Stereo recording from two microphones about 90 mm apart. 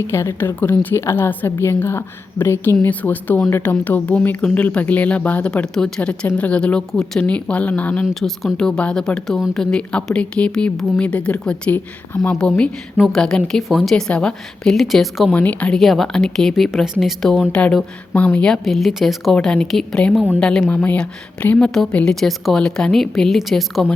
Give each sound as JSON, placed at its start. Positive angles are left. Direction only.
{"t": 0.1, "sound": "a woman's voice", "side_deg": 30}
{"t": 8.1, "sound": "speech", "side_deg": 5}
{"t": 15.4, "sound": "speech", "side_deg": 15}
{"t": 15.8, "sound": "a woman's voice", "side_deg": 5}
{"t": 18.4, "sound": "speech", "side_deg": 5}
{"t": 20.7, "sound": "speech", "side_deg": 20}